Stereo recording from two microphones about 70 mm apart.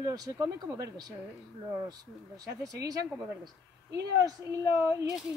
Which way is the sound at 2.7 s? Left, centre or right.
Right.